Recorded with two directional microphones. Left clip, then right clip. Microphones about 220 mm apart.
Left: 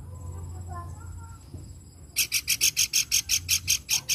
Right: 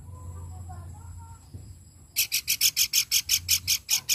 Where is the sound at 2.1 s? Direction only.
5° right (ahead or behind).